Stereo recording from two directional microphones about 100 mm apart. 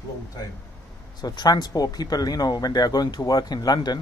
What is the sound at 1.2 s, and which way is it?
Speech, 45° left (ahead or behind).